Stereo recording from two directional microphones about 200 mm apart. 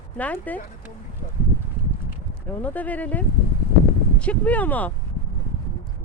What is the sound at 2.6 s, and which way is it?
Speech, 10° left (ahead or behind).